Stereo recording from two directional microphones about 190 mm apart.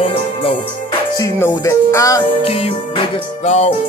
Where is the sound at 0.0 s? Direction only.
25° left (ahead or behind).